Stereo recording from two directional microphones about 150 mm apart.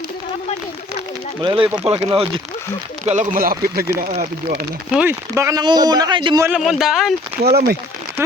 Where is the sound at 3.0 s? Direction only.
50° right (ahead or behind); by 3.5 s 70° right (ahead or behind).